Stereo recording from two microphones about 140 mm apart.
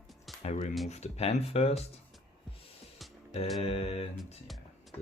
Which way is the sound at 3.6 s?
45° left (ahead or behind).